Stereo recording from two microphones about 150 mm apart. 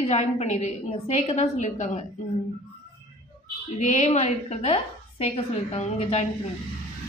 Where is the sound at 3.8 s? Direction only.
50° left (ahead or behind).